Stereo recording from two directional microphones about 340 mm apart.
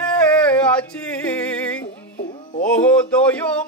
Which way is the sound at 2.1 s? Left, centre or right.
Left.